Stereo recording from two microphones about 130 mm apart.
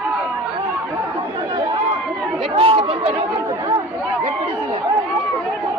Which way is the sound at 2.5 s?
45° right (ahead or behind).